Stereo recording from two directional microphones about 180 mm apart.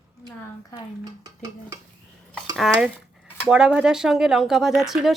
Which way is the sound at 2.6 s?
Centre (ahead or behind).